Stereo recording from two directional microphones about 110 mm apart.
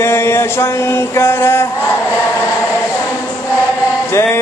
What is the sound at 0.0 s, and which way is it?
Mantra, 25° left (ahead or behind).